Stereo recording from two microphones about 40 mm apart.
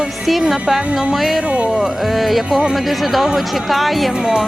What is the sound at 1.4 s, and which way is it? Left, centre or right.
Speech, right.